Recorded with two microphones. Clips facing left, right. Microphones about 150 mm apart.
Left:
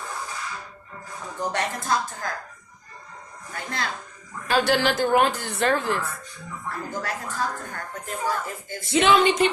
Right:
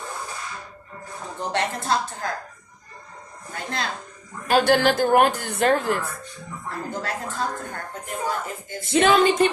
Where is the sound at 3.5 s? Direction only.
25° right (ahead or behind).